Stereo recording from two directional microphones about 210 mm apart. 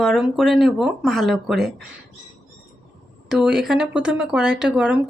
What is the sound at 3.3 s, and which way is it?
Speech, 5° right (ahead or behind).